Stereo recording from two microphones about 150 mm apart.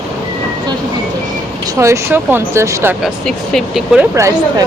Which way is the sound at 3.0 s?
Centre (ahead or behind).